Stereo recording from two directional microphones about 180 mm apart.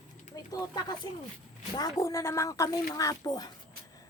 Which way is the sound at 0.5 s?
25° left (ahead or behind).